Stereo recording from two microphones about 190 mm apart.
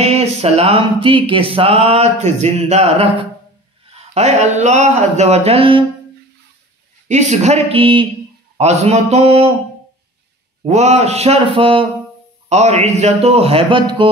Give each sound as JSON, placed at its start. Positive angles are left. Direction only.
{"t": 0.0, "sound": "speech", "side_deg": -35}
{"t": 7.1, "sound": "speech", "side_deg": -40}
{"t": 10.6, "sound": "speech", "side_deg": -35}